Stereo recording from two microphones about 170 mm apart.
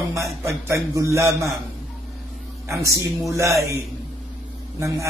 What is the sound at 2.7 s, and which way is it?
Speech, 20° right (ahead or behind).